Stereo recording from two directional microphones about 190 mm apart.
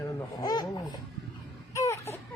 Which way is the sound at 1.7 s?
15° left (ahead or behind).